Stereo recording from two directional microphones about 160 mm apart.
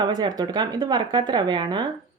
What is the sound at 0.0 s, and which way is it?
Speech, 25° right (ahead or behind).